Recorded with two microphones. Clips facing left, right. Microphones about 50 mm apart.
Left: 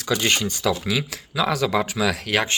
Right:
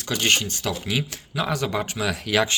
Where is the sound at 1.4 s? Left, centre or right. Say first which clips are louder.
Left 4 dB; left.